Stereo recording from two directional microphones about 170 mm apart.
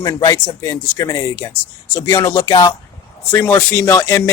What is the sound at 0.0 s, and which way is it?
Speech, 20° left (ahead or behind).